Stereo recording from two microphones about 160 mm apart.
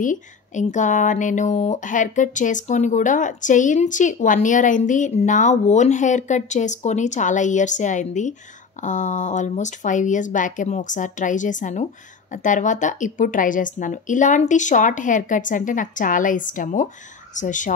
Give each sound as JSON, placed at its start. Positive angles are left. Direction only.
{"t": 0.0, "sound": "speech", "side_deg": 50}